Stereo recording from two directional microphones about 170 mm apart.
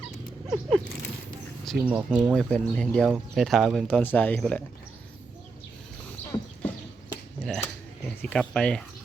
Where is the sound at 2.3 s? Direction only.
5° left (ahead or behind).